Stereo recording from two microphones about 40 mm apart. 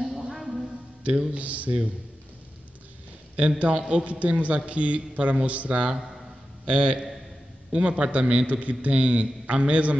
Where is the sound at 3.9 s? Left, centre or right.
Right.